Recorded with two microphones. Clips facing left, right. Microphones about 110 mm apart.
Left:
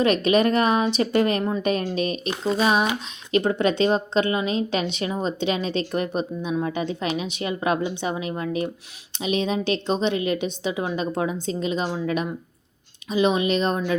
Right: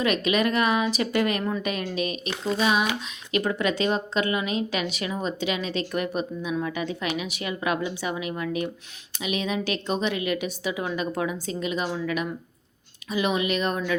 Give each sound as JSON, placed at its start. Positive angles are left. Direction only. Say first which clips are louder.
{"t": 0.0, "sound": "a woman's voice", "louder": "left 4 dB", "side_deg": 35}